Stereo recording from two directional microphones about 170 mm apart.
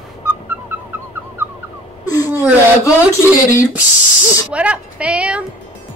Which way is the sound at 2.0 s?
20° left (ahead or behind).